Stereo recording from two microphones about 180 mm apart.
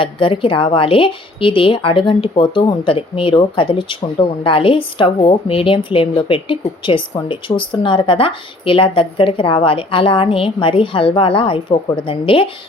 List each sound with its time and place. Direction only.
0.0 s speech: 30° left (ahead or behind)